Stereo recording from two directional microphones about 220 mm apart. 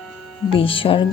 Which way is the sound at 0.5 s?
25° left (ahead or behind).